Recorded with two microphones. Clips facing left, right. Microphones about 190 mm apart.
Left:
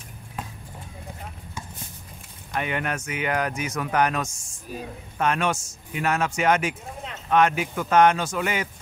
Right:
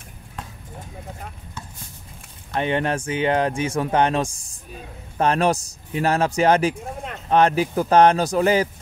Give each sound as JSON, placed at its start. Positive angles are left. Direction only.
{"t": 2.5, "sound": "speech", "side_deg": -30}